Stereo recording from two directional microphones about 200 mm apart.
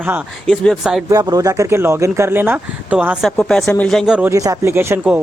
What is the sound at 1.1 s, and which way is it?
Speech, 15° right (ahead or behind).